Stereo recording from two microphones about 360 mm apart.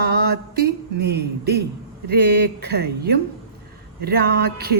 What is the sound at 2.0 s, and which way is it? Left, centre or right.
Speech, right.